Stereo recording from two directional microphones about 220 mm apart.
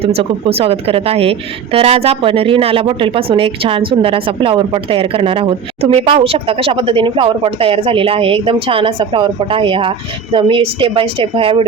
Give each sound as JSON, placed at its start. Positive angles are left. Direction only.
{"t": 0.0, "sound": "speech", "side_deg": -25}